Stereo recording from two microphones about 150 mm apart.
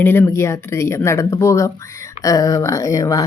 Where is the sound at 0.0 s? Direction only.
15° left (ahead or behind).